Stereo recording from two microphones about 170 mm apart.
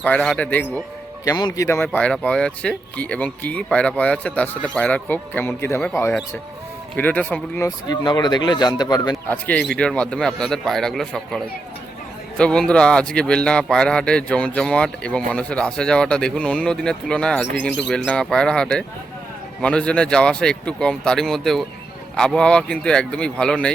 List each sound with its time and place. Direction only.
0.0 s speech: 10° left (ahead or behind)
1.2 s speech: 20° left (ahead or behind)
7.9 s speech: 25° left (ahead or behind)
9.3 s a man's voice: 5° left (ahead or behind)